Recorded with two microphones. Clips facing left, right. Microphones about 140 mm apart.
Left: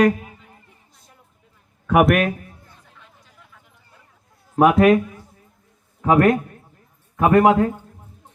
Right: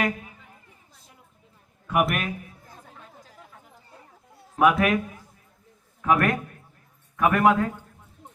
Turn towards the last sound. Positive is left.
turn(degrees=30)  # may be behind; listen again after turning